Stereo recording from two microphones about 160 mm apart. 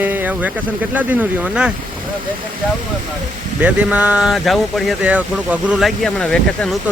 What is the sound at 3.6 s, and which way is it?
Speech, 10° right (ahead or behind).